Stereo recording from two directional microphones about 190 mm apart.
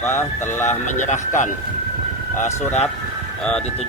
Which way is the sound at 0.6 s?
40° left (ahead or behind).